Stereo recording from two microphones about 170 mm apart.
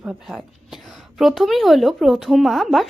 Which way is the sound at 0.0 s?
5° right (ahead or behind).